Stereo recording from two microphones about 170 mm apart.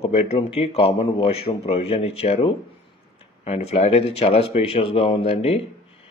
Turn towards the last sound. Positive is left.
turn(degrees=35)  # may be behind; listen again after turning